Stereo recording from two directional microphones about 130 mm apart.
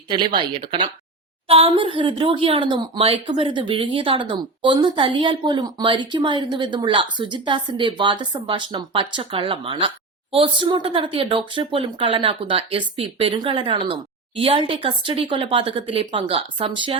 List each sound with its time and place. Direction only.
0.1 s speech: 40° right (ahead or behind)